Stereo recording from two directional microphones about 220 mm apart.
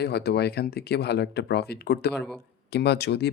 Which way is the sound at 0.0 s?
50° left (ahead or behind).